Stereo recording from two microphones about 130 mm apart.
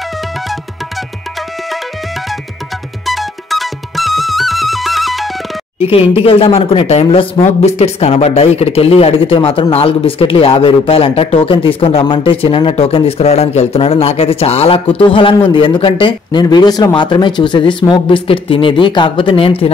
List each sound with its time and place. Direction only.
3.1 s music: centre (ahead or behind)
5.8 s speech: 50° left (ahead or behind)
7.4 s speech: 55° left (ahead or behind)